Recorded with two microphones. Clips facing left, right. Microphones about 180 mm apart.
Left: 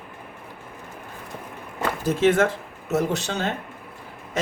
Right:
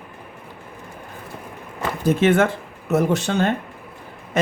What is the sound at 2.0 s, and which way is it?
Speech, 60° right (ahead or behind).